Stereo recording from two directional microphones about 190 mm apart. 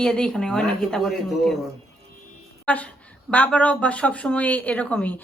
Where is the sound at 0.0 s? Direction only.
5° left (ahead or behind).